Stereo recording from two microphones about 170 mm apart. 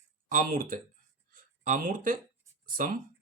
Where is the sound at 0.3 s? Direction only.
55° right (ahead or behind).